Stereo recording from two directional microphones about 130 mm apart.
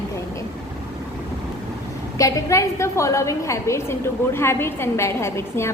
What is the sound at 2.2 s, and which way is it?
A woman's voice, 25° left (ahead or behind).